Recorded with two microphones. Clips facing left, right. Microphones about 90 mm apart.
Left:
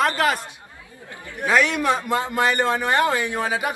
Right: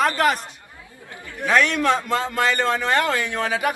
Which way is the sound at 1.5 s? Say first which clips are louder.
Right 1 dB; 10° left (ahead or behind).